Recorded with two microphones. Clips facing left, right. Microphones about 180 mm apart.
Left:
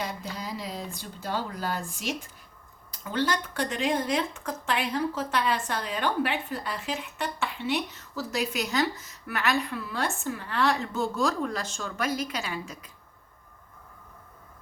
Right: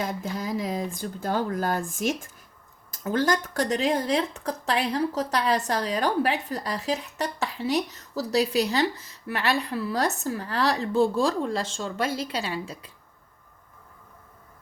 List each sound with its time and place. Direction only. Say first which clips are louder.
0.0 s speech: right 5 dB; 50° right (ahead or behind); by 12.9 s 30° right (ahead or behind)